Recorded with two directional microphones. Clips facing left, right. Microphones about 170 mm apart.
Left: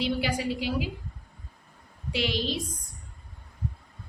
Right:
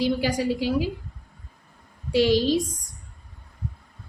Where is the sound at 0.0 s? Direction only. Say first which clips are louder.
Right 5 dB; 40° right (ahead or behind).